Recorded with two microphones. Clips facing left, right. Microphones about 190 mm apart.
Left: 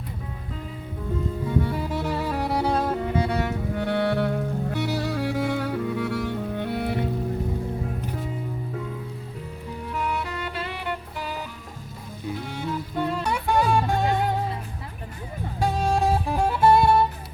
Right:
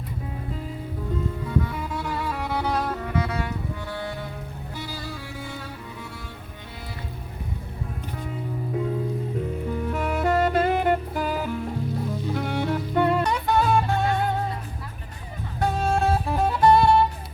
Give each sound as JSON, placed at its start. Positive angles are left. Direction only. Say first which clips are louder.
{"t": 1.5, "sound": "music", "louder": "left 4 dB", "side_deg": 35}
{"t": 3.8, "sound": "saxophone", "louder": "left 9 dB", "side_deg": 70}
{"t": 9.8, "sound": "music", "louder": "right 3 dB", "side_deg": -45}
{"t": 12.3, "sound": "music", "louder": "right 3 dB", "side_deg": -65}
{"t": 13.2, "sound": "music", "louder": "even", "side_deg": 10}
{"t": 15.6, "sound": "music", "louder": "even", "side_deg": 15}